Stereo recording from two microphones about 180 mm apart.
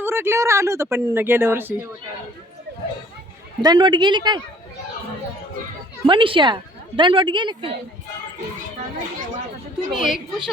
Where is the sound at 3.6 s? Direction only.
25° right (ahead or behind).